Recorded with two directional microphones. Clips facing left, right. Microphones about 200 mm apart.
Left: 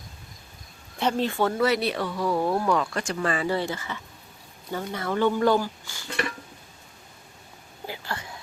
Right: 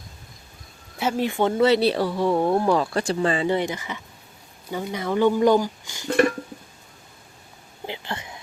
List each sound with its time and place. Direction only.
0.9 s speech: 10° right (ahead or behind)
6.1 s a sound: 45° right (ahead or behind)
7.9 s whispering: 20° right (ahead or behind)